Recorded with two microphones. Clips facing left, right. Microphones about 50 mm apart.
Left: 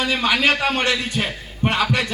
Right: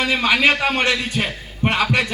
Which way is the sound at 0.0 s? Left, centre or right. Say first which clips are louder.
Right 2 dB; centre.